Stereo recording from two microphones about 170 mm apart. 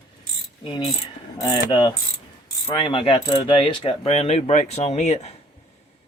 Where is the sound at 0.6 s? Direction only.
30° left (ahead or behind).